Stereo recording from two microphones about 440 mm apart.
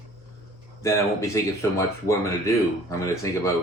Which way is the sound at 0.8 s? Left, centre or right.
Centre.